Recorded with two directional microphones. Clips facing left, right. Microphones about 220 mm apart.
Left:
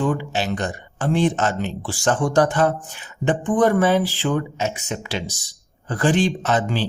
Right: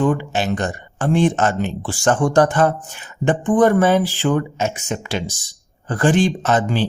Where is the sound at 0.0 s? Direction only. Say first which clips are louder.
Right 4 dB; 50° right (ahead or behind).